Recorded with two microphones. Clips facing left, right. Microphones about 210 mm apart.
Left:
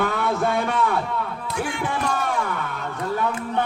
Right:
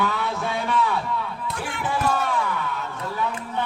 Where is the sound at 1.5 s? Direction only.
Centre (ahead or behind).